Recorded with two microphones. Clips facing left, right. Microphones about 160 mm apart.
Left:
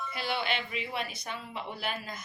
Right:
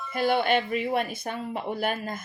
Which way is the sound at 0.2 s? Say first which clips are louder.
Right 10 dB; 50° right (ahead or behind).